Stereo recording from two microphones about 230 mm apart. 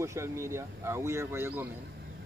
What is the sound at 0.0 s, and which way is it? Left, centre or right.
Speech, centre.